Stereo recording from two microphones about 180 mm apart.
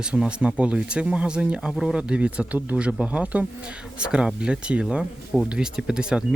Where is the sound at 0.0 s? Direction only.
5° right (ahead or behind).